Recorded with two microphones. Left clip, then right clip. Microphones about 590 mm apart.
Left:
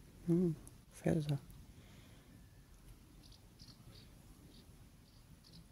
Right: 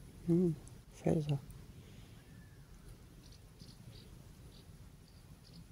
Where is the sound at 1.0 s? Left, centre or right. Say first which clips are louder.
Right 2 dB; left.